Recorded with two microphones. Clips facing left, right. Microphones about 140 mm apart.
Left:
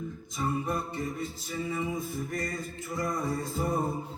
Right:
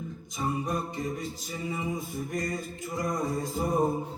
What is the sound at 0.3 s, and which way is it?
Music, 15° right (ahead or behind).